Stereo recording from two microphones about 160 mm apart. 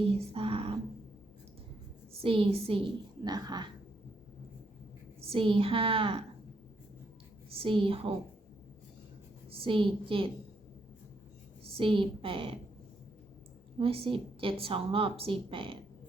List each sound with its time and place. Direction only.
0.1 s a sound: 35° right (ahead or behind)
2.2 s a woman's voice: 35° right (ahead or behind)
3.2 s speech: 25° right (ahead or behind)
5.3 s a woman's voice: 35° right (ahead or behind)
7.5 s a woman's voice: 35° right (ahead or behind)
9.5 s a woman's voice: 35° right (ahead or behind)
11.6 s a woman's voice: 35° right (ahead or behind)
13.7 s a woman's voice: 35° right (ahead or behind)